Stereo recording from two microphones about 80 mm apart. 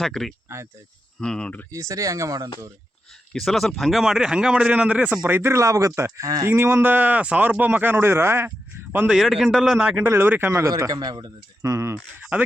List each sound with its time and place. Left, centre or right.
0.0 s a man's voice: centre
0.4 s speech: right
1.2 s speech: centre
1.7 s a man's voice: right
3.3 s a man's voice: centre
5.3 s a man's voice: right
9.0 s a man's voice: centre
10.1 s speech: right
10.5 s a man's voice: right
12.2 s speech: centre